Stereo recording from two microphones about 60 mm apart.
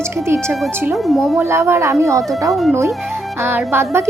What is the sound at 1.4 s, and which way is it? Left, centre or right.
Speech, right.